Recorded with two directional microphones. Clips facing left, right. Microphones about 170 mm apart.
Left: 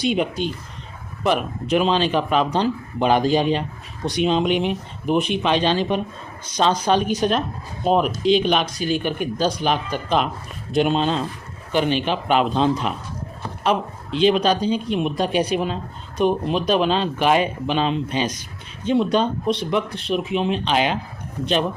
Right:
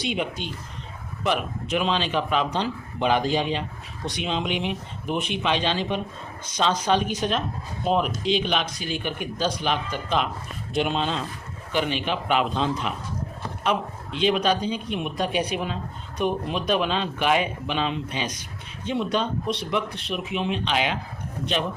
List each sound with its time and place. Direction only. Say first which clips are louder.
0.0 s a man's voice: left 7 dB; 40° left (ahead or behind)